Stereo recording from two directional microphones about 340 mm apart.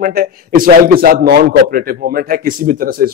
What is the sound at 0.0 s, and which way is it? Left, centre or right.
A man's voice, right.